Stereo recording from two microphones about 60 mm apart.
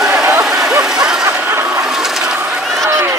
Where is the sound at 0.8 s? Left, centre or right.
Centre.